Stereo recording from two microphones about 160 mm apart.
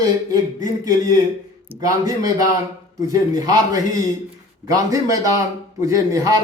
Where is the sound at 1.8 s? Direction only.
20° right (ahead or behind).